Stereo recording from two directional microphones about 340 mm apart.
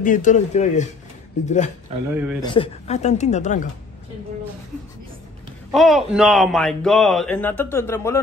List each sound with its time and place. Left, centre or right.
0.0 s speech: left
1.9 s speech: centre
2.4 s speech: centre
5.7 s a man's voice: centre